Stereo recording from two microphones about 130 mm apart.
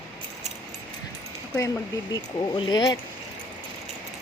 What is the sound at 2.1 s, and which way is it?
Speech, 30° left (ahead or behind).